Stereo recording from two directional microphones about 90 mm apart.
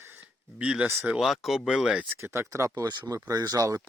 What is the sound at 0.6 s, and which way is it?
Speech, 10° right (ahead or behind).